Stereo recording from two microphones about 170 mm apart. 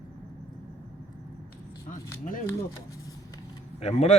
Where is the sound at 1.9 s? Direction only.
50° left (ahead or behind).